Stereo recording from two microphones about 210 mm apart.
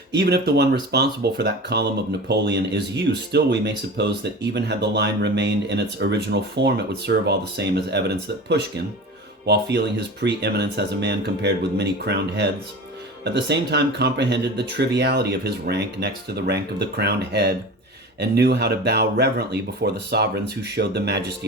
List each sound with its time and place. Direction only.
0.2 s speech: 50° right (ahead or behind)